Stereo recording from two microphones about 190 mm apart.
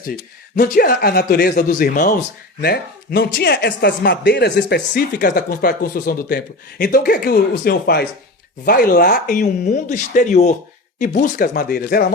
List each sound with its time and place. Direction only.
0.5 s speech: 50° left (ahead or behind)
2.6 s speech: 55° left (ahead or behind)